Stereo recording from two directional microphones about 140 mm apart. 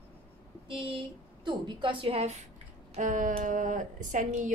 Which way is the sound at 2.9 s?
65° right (ahead or behind).